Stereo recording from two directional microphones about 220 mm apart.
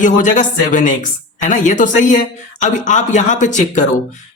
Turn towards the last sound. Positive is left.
turn(degrees=35)  # may be behind; listen again after turning